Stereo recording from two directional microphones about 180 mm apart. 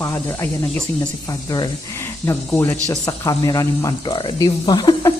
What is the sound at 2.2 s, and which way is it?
Speech, 15° left (ahead or behind).